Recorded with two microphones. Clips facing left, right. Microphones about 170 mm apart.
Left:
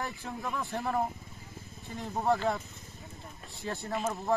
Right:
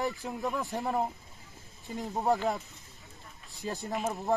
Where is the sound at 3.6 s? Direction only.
15° right (ahead or behind).